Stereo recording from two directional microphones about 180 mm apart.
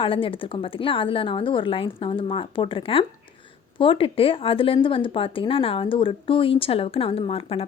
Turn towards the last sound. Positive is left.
turn(degrees=30)  # may be behind; listen again after turning